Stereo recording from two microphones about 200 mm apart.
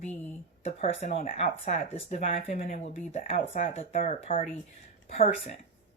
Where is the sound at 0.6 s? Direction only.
30° left (ahead or behind).